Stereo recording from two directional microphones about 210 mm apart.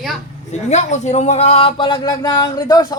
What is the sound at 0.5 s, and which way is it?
A man's voice, 35° left (ahead or behind).